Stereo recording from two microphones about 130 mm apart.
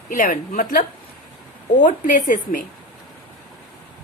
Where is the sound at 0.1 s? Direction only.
90° left.